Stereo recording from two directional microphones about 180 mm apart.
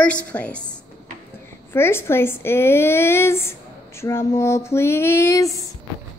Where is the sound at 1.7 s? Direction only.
15° left (ahead or behind).